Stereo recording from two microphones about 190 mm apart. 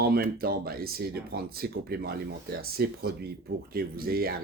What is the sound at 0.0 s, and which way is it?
Speech, 55° right (ahead or behind).